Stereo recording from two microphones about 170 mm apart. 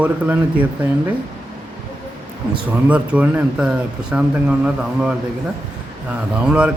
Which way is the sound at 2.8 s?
10° right (ahead or behind).